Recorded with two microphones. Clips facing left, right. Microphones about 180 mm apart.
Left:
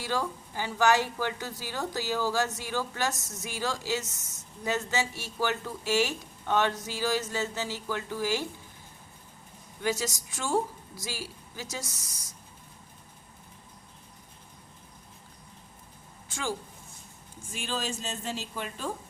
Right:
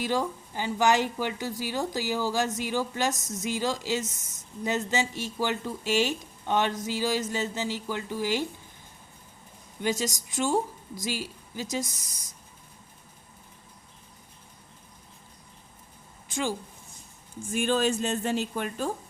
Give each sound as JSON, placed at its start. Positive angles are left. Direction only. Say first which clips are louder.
{"t": 0.0, "sound": "a woman's voice", "louder": "right 3 dB", "side_deg": -15}
{"t": 9.8, "sound": "a woman's voice", "louder": "right 2 dB", "side_deg": -20}
{"t": 16.3, "sound": "speech", "louder": "right 4 dB", "side_deg": -20}
{"t": 17.5, "sound": "speech", "louder": "right 9 dB", "side_deg": -55}